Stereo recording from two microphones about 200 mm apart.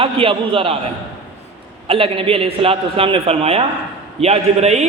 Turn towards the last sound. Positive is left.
turn(degrees=-35)  # may be behind; listen again after turning